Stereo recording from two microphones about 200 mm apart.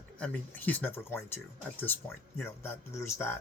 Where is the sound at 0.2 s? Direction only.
10° left (ahead or behind).